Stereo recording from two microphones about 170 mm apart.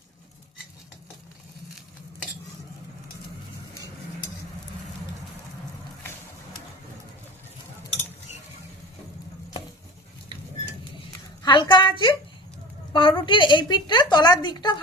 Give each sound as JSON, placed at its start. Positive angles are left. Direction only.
{"t": 11.4, "sound": "a woman's voice", "side_deg": 25}